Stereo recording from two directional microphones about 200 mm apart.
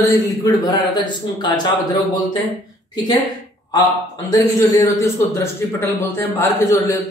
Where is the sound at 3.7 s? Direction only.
15° left (ahead or behind).